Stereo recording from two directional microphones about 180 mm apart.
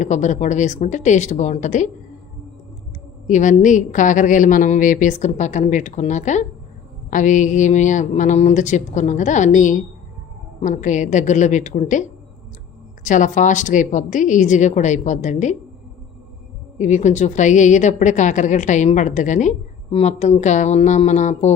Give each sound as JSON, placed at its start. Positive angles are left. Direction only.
{"t": 0.0, "sound": "a woman's voice", "side_deg": 40}
{"t": 3.2, "sound": "a woman's voice", "side_deg": 45}
{"t": 16.7, "sound": "a woman's voice", "side_deg": 40}